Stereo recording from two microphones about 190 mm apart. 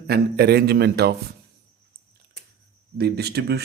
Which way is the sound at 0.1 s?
55° right (ahead or behind).